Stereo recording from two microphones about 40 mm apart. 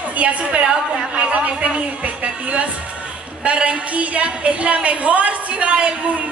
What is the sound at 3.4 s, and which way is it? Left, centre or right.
A woman's voice, right.